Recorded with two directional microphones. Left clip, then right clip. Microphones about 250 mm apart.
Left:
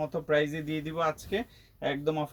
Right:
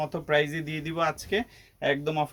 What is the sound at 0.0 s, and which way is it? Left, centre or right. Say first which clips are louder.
Speech: right 2 dB; right.